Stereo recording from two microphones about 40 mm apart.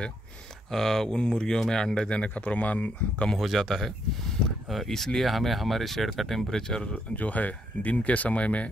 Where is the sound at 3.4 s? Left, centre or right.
Centre.